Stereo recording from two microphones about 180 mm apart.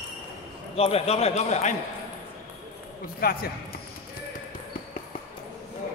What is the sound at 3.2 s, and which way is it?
Speech, 55° left (ahead or behind).